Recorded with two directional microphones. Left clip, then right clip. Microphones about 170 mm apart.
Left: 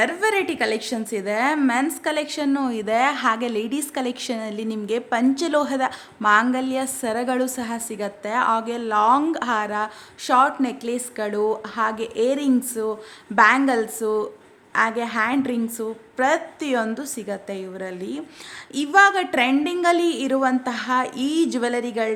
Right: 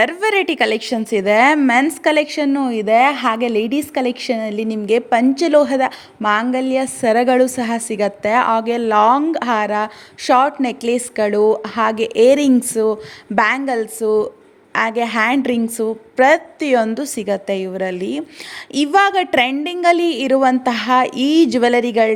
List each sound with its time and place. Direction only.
0.0 s a woman's voice: 40° right (ahead or behind)